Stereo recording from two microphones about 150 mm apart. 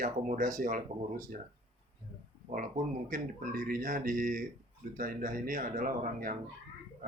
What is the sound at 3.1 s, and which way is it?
Speech, 60° right (ahead or behind).